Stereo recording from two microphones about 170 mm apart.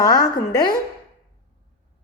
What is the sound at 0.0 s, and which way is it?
Speech, 20° left (ahead or behind).